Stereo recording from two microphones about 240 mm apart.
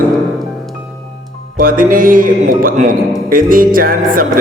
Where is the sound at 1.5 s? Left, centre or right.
Right.